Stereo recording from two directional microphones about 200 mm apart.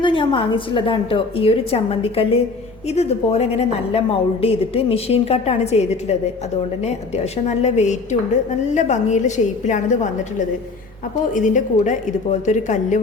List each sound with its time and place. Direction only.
0.0 s a woman's voice: 25° left (ahead or behind)
7.4 s a woman's voice: 35° left (ahead or behind)
11.3 s a woman's voice: 40° left (ahead or behind)